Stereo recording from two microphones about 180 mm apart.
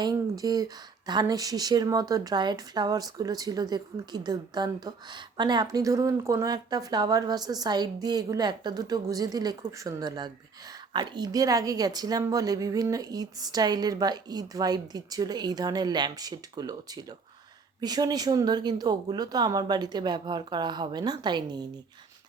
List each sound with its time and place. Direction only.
0.0 s speech: 20° right (ahead or behind)